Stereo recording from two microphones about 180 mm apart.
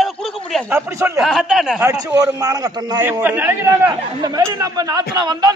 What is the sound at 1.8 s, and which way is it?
A man's voice, 20° right (ahead or behind).